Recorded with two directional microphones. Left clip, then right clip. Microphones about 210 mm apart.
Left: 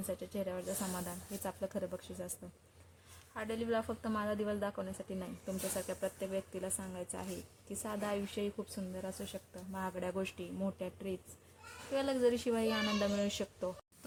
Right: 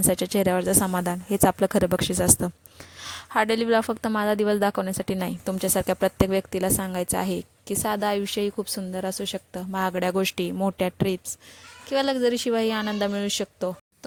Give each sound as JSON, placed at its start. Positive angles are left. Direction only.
{"t": 0.1, "sound": "a woman's voice", "side_deg": -45}